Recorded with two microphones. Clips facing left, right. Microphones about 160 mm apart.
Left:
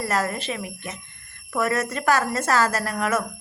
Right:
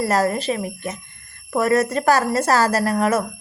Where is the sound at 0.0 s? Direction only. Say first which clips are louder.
Right 6 dB; 35° right (ahead or behind).